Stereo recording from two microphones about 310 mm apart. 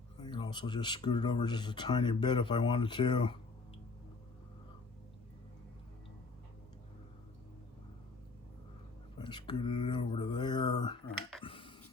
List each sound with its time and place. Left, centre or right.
0.2 s speech: centre
9.1 s speech: centre
11.4 s a sound: centre